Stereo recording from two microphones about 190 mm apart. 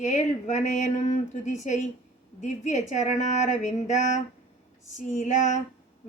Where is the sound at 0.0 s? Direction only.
40° left (ahead or behind).